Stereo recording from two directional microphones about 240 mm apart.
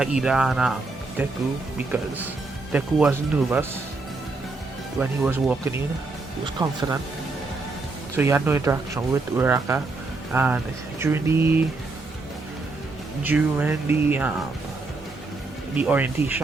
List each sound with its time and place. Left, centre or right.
0.0 s speech: centre
1.9 s speech: centre
4.9 s speech: centre
8.1 s speech: centre
13.2 s speech: centre
15.7 s speech: centre